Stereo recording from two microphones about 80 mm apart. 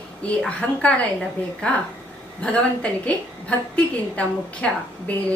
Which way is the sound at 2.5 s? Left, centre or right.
Centre.